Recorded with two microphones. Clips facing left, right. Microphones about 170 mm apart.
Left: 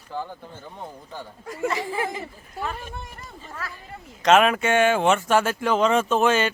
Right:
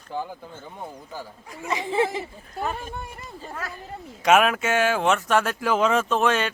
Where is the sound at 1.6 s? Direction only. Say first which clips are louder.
Right 2 dB; 20° right (ahead or behind).